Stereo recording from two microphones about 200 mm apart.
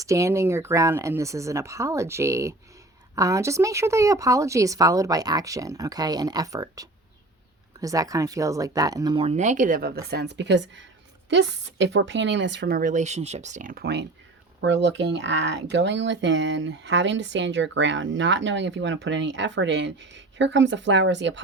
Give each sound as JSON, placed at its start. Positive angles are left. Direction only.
{"t": 0.0, "sound": "speech", "side_deg": -15}